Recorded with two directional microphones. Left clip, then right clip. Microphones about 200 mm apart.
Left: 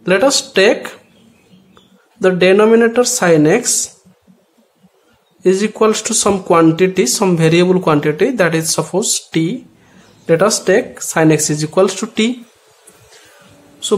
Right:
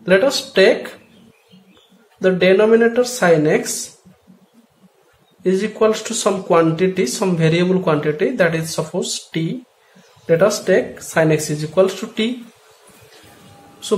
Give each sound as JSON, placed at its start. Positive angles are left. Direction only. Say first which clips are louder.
{"t": 0.0, "sound": "speech", "louder": "left 2 dB", "side_deg": 30}
{"t": 2.2, "sound": "speech", "louder": "left 3 dB", "side_deg": 30}
{"t": 5.4, "sound": "speech", "louder": "left 4 dB", "side_deg": 30}